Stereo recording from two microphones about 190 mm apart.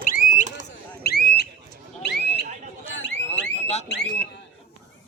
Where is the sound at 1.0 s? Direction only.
55° left (ahead or behind).